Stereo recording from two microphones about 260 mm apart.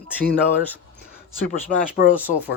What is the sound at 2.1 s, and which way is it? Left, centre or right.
Speech, centre.